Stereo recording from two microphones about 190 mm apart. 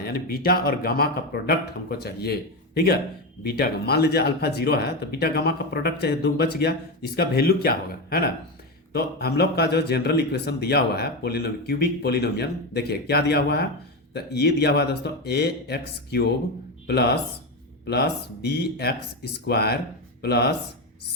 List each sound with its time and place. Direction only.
0.0 s speech: 50° left (ahead or behind)